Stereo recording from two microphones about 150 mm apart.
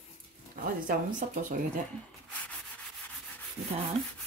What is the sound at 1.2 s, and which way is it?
Speech, 65° right (ahead or behind).